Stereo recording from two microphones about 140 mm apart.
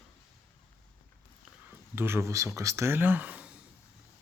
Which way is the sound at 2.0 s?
15° right (ahead or behind).